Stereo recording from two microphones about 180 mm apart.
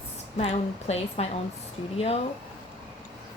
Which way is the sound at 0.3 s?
35° left (ahead or behind).